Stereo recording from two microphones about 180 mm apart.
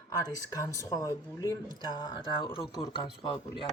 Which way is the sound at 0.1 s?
20° left (ahead or behind).